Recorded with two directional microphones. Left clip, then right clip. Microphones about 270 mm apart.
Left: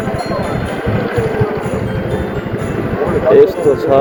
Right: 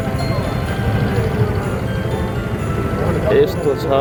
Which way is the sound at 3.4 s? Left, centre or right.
Centre.